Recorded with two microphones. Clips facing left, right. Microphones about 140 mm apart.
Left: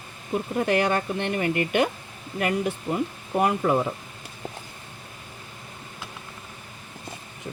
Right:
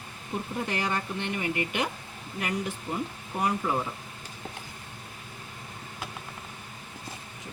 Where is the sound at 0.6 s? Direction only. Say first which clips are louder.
Left 9 dB; 70° left (ahead or behind).